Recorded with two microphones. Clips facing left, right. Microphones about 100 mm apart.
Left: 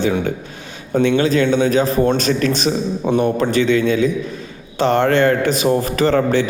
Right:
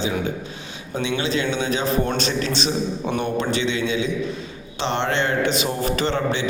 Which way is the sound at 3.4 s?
45° left (ahead or behind).